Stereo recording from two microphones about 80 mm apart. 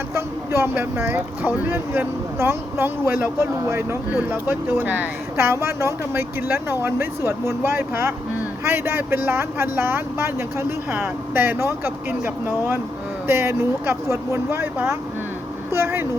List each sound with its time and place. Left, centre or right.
0.1 s speech: right
5.5 s speech: right
15.7 s speech: right